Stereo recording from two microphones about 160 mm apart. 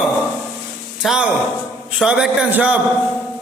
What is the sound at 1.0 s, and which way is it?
A man's voice, 5° right (ahead or behind).